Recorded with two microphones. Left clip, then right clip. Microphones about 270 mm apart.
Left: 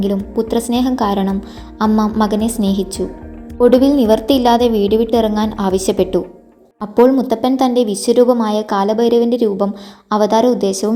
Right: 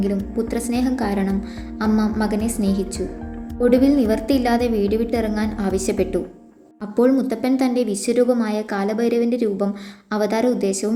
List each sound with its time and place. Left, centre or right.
0.0 s a woman's voice: centre